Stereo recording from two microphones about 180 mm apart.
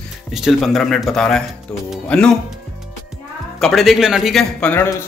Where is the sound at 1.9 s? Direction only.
5° left (ahead or behind).